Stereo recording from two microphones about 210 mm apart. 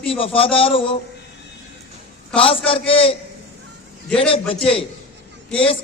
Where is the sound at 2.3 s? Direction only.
25° left (ahead or behind).